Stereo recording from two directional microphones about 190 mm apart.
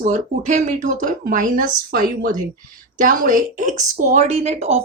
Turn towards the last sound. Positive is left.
turn(degrees=-35)  # may be behind; listen again after turning